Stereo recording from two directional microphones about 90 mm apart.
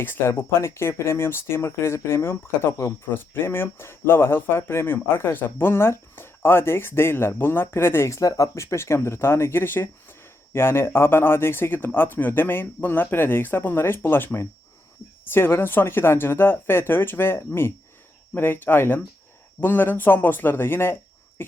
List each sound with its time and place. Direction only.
0.0 s speech: 25° left (ahead or behind)